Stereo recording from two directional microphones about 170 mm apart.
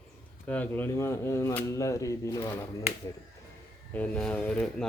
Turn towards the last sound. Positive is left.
turn(degrees=5)  # may be behind; listen again after turning